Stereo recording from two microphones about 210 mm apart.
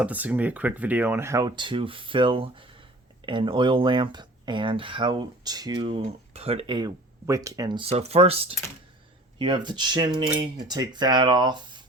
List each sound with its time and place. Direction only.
0.0 s speech: 5° right (ahead or behind)